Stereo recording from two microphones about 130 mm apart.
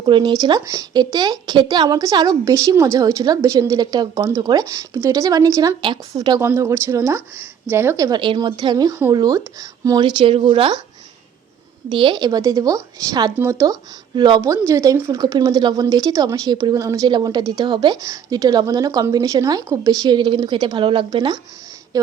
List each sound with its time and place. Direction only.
0.0 s a woman's voice: 35° right (ahead or behind)
8.2 s speech: 40° right (ahead or behind)
11.9 s a woman's voice: 40° right (ahead or behind)
14.2 s speech: 35° right (ahead or behind)
14.7 s a woman's voice: 20° right (ahead or behind)
17.1 s speech: 35° right (ahead or behind)